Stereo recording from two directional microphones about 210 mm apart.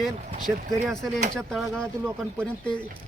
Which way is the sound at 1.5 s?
5° left (ahead or behind).